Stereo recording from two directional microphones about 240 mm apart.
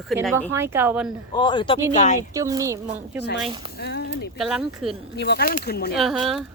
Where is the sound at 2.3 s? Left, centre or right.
Centre.